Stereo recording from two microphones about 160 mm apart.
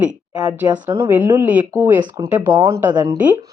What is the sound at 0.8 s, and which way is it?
A woman's voice, 15° right (ahead or behind).